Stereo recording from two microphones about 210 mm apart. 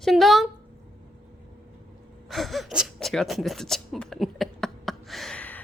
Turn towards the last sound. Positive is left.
turn(degrees=5)  # may be behind; listen again after turning